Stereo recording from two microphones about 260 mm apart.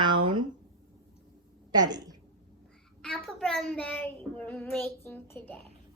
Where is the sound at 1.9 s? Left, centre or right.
Centre.